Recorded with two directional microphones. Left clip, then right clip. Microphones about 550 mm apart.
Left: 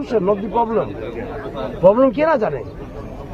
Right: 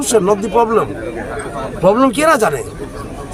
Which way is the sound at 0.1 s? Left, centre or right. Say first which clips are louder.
Right 5 dB; left.